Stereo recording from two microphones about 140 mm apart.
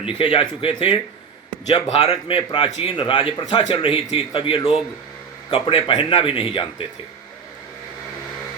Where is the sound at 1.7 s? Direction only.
50° left (ahead or behind).